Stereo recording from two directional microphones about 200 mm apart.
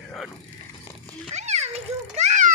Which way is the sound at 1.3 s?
35° right (ahead or behind).